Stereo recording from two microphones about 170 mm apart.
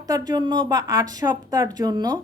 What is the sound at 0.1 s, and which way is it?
A woman's voice, 25° right (ahead or behind).